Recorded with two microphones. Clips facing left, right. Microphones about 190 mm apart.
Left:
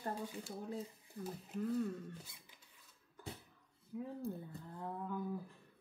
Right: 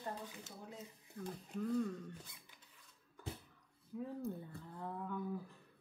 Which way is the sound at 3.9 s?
10° left (ahead or behind).